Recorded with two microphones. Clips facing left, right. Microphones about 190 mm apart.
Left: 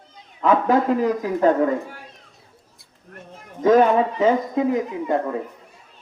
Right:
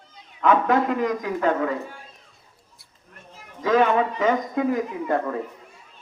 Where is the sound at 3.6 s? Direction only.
45° left (ahead or behind).